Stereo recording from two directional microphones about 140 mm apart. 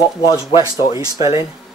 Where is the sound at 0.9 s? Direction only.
25° right (ahead or behind).